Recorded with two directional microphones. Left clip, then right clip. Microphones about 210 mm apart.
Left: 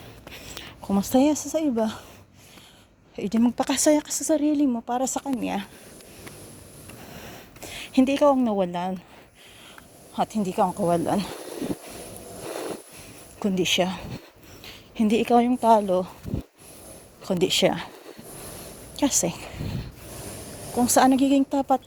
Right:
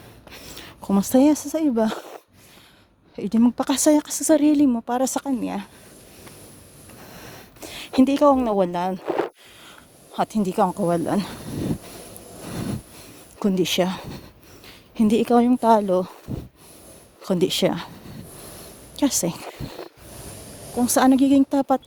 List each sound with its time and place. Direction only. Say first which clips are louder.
0.3 s a sound: even; 40° right (ahead or behind)
1.1 s a woman's voice: right 3 dB; 35° right (ahead or behind)
3.2 s a woman's voice: right 2 dB; 25° right (ahead or behind); by 5.3 s 40° right (ahead or behind)
5.4 s speech: even; 25° right (ahead or behind)
7.0 s a sound: right 1 dB; 35° right (ahead or behind)
8.4 s a woman's voice: right 4 dB; 45° right (ahead or behind)
10.2 s a woman's voice: right 2 dB; 40° right (ahead or behind)
10.8 s a woman's voice: right 1 dB; 30° right (ahead or behind)
13.4 s a woman's voice: right 2 dB; 35° right (ahead or behind)
17.2 s a woman's voice: even; 35° right (ahead or behind)
18.9 s a woman's voice: right 1 dB; 30° right (ahead or behind)
20.7 s a woman's voice: right 1 dB; 30° right (ahead or behind)